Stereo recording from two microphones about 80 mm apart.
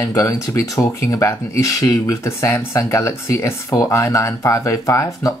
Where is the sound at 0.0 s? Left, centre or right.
Left.